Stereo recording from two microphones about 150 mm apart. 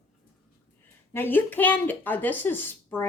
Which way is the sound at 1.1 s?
15° left (ahead or behind).